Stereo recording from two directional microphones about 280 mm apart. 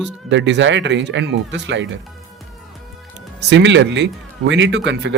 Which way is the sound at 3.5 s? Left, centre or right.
Right.